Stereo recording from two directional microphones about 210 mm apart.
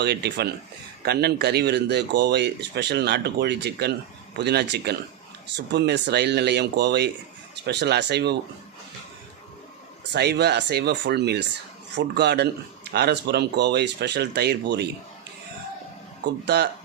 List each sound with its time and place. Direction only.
0.0 s speech: 50° right (ahead or behind)
10.1 s speech: 55° right (ahead or behind)
16.2 s speech: 50° right (ahead or behind)